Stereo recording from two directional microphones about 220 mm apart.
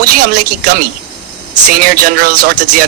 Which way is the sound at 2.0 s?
40° right (ahead or behind).